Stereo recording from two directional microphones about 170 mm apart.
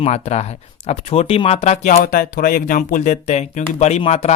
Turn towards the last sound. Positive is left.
turn(degrees=35)  # may be behind; listen again after turning